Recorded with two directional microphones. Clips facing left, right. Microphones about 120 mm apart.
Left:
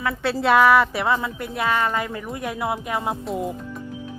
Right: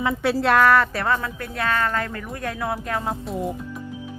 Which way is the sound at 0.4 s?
5° left (ahead or behind).